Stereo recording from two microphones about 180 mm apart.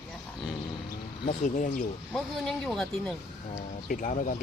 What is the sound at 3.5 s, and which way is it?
Speech, 45° left (ahead or behind).